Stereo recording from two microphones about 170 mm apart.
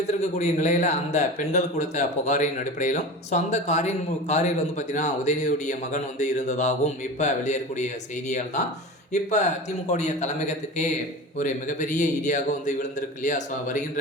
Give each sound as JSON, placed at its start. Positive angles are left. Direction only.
{"t": 0.2, "sound": "a man's voice", "side_deg": 45}